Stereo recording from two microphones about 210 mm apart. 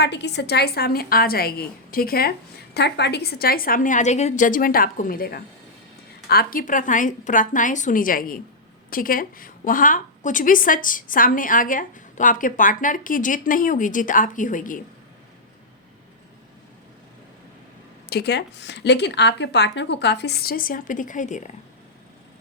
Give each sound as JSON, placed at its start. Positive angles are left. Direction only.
{"t": 0.0, "sound": "a woman's voice", "side_deg": 55}
{"t": 18.1, "sound": "a woman's voice", "side_deg": 50}